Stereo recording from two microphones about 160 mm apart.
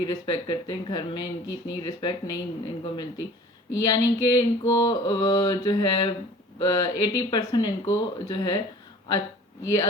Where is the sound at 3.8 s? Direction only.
30° left (ahead or behind).